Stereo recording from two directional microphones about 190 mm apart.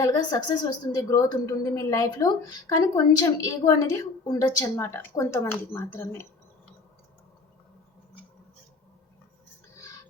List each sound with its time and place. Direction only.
0.0 s a woman's voice: 20° left (ahead or behind)